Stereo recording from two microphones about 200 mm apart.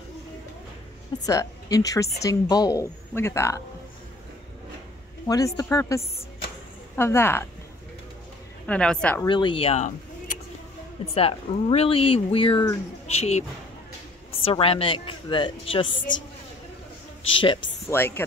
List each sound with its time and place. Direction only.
1.2 s speech: 15° left (ahead or behind)
5.2 s speech: 15° left (ahead or behind)
8.6 s a woman's voice: 5° left (ahead or behind)
9.2 s speech: 25° left (ahead or behind); by 10.4 s 40° left (ahead or behind)
11.1 s speech: 30° left (ahead or behind)
17.3 s speech: 25° left (ahead or behind)
17.8 s speech: 10° left (ahead or behind)